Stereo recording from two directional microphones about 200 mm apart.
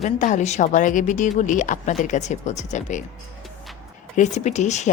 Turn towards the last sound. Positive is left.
turn(degrees=35)  # may be behind; listen again after turning